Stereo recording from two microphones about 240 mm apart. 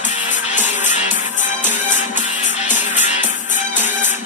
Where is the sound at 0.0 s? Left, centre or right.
Left.